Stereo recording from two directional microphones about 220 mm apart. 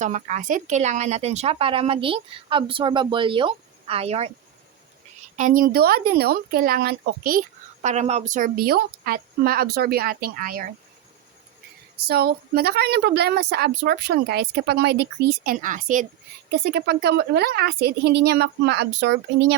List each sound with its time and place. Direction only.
0.0 s speech: 35° right (ahead or behind)
5.4 s speech: 35° right (ahead or behind)
11.9 s speech: 45° right (ahead or behind)
16.5 s speech: 50° right (ahead or behind)